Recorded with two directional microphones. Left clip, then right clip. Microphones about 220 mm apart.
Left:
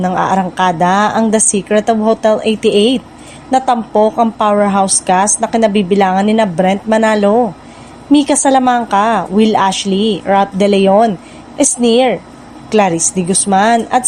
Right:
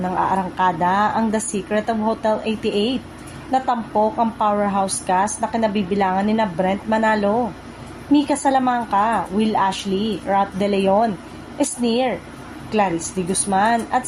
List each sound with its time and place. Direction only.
0.0 s a woman's voice: 45° left (ahead or behind)